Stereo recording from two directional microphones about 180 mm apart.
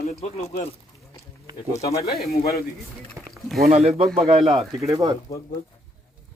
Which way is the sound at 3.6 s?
35° right (ahead or behind).